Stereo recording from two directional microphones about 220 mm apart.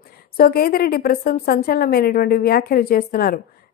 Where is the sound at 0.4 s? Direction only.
40° left (ahead or behind).